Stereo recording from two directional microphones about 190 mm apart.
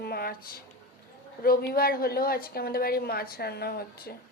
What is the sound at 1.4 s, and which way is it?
A woman's voice, 55° left (ahead or behind).